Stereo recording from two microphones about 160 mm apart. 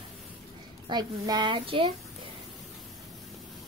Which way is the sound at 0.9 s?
25° right (ahead or behind).